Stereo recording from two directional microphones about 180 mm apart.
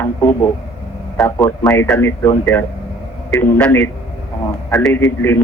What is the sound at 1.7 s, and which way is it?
A man's voice, 10° left (ahead or behind).